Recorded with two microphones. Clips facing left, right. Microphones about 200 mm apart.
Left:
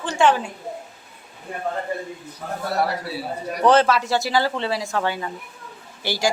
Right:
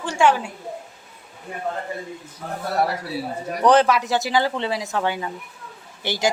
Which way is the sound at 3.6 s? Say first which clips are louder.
Even; 15° right (ahead or behind).